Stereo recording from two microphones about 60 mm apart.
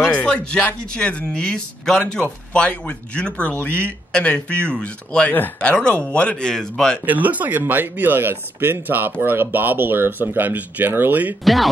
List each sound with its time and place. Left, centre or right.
0.0 s speech: centre
7.1 s speech: right
11.4 s speech: centre